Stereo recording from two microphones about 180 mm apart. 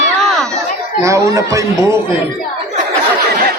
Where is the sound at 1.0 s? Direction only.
15° right (ahead or behind).